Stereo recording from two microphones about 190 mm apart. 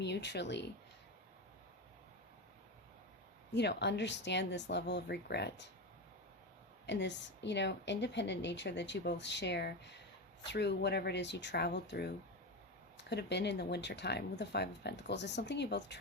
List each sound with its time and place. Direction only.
0.0 s speech: 65° left (ahead or behind)
3.5 s speech: 65° left (ahead or behind)
6.8 s speech: 65° left (ahead or behind)